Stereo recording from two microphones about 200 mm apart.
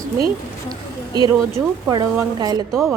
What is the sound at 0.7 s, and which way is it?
A woman's voice, 20° right (ahead or behind).